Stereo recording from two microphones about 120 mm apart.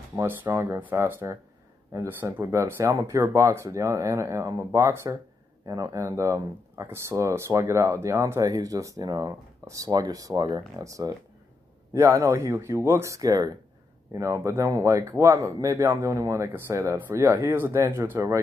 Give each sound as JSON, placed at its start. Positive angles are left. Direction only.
{"t": 0.1, "sound": "speech", "side_deg": -15}